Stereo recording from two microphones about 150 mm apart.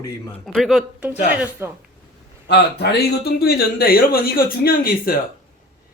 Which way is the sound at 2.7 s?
90° left.